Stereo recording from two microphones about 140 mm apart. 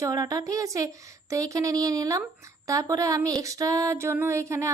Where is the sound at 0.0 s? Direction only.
25° right (ahead or behind).